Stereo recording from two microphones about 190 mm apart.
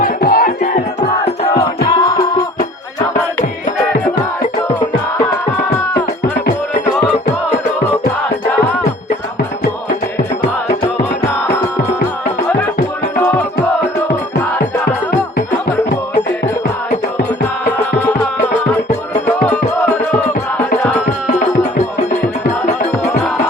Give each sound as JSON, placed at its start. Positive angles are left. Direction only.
{"t": 0.0, "sound": "music", "side_deg": 50}
{"t": 1.9, "sound": "music", "side_deg": 25}
{"t": 21.2, "sound": "music", "side_deg": 40}